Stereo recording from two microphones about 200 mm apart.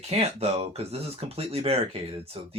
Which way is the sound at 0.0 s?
30° right (ahead or behind).